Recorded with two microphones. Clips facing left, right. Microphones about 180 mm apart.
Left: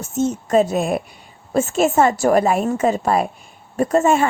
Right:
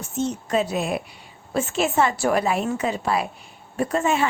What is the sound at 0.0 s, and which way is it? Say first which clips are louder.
A woman's voice: left 5 dB; 45° left (ahead or behind).